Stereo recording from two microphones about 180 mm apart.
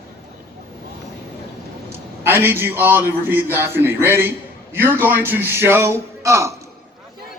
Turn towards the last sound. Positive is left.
turn(degrees=-15)  # may be behind; listen again after turning